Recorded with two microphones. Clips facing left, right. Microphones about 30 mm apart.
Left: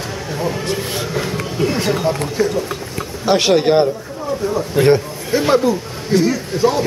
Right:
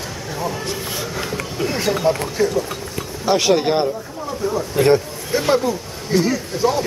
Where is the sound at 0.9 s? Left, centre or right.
Left.